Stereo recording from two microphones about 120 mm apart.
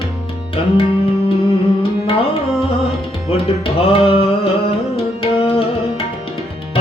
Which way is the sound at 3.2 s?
55° left (ahead or behind).